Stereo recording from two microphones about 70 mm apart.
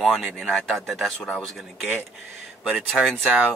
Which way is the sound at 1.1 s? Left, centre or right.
Centre.